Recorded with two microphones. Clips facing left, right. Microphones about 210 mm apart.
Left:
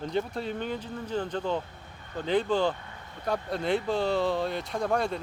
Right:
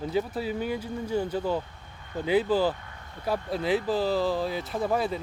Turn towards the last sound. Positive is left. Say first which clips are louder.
# right 1 dB
turn(degrees=-5)  # may be behind; listen again after turning